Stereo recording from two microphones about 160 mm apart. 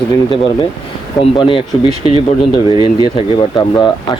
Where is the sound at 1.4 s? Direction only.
30° left (ahead or behind).